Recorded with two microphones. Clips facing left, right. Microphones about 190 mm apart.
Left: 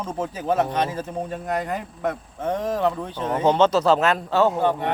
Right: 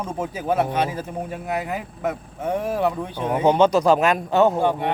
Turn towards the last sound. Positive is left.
turn(degrees=-15)  # may be behind; listen again after turning